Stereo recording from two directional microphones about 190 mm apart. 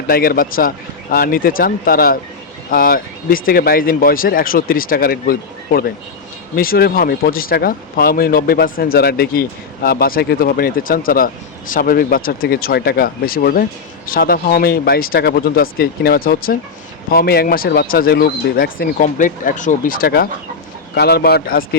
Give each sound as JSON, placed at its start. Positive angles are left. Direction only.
{"t": 0.1, "sound": "speech", "side_deg": 50}